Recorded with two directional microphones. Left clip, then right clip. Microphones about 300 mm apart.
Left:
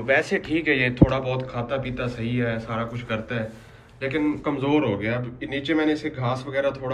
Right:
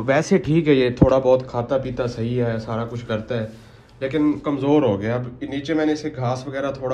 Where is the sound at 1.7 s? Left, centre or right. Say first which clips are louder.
Right 7 dB; centre.